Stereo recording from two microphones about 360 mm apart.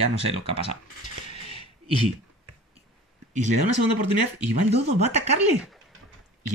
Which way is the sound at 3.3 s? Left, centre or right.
Centre.